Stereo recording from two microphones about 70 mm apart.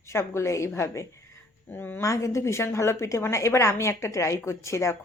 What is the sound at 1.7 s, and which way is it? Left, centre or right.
Speech, left.